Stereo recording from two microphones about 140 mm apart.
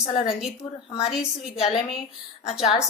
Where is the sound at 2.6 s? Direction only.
50° left (ahead or behind).